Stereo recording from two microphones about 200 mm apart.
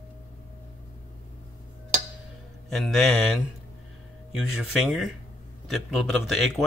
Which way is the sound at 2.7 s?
Centre (ahead or behind).